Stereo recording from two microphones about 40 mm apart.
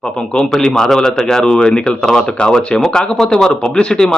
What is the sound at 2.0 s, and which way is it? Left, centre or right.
Speech, centre.